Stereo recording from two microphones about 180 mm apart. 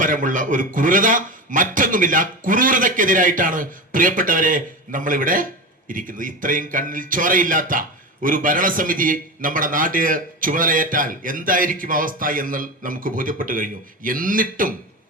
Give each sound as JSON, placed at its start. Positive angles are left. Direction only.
{"t": 0.0, "sound": "speech", "side_deg": -45}